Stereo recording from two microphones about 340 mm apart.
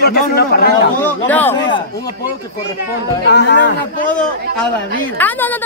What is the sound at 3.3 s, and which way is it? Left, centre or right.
Speech, left.